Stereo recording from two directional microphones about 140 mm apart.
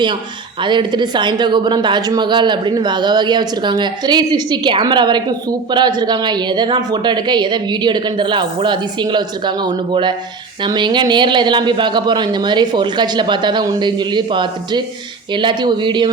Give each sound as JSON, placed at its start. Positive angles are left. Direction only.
{"t": 0.6, "sound": "a woman's voice", "side_deg": -35}